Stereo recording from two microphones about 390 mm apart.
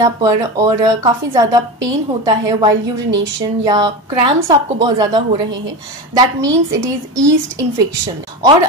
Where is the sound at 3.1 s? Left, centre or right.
Right.